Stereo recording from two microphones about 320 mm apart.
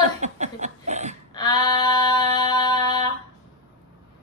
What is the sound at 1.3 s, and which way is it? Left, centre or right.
Female singing, centre.